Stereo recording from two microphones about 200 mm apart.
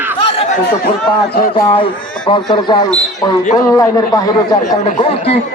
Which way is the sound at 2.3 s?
25° left (ahead or behind).